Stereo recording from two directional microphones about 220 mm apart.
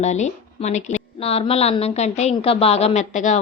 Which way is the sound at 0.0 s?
30° left (ahead or behind).